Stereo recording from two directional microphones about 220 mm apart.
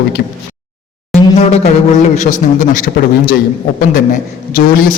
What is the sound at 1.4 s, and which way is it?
A man's voice, 30° left (ahead or behind).